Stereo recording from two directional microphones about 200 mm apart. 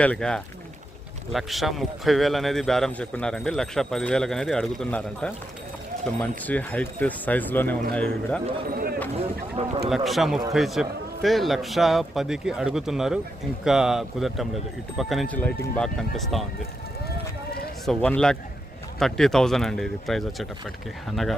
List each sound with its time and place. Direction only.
0.0 s a man's voice: 5° left (ahead or behind)
9.1 s speech: 30° right (ahead or behind)
9.9 s a man's voice: centre (ahead or behind)
17.8 s a man's voice: 5° left (ahead or behind)